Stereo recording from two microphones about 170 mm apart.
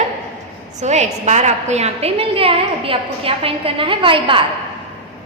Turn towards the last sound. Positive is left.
turn(degrees=-30)  # may be behind; listen again after turning